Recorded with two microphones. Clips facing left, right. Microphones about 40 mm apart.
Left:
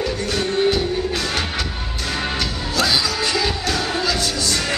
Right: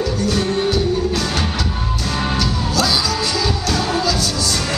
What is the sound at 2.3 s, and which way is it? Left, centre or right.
Music, left.